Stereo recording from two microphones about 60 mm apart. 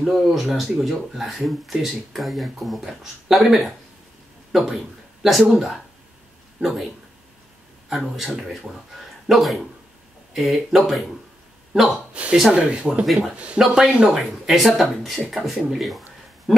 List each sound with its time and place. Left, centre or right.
0.0 s speech: centre
7.9 s speech: centre
12.1 s a sound: centre
12.4 s speech: centre
14.2 s speech: centre
16.5 s a sound: centre